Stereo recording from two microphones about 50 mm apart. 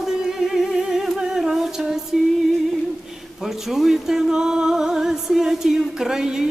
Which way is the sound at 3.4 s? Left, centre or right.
Centre.